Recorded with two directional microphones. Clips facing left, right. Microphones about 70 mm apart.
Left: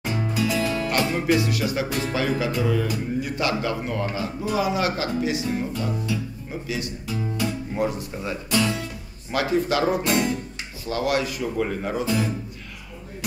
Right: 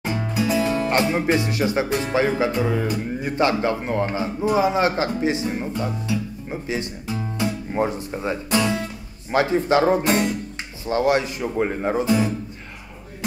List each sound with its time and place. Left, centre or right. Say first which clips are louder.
0.2 s music: left 1 dB; right
0.6 s speech: right 3 dB; right